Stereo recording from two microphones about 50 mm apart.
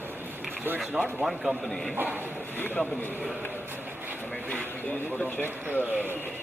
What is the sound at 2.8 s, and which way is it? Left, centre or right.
Speech, centre.